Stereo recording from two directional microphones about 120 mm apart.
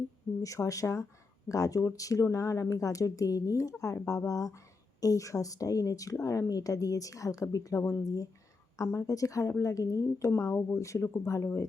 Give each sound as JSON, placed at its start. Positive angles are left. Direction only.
{"t": 0.4, "sound": "speech", "side_deg": 25}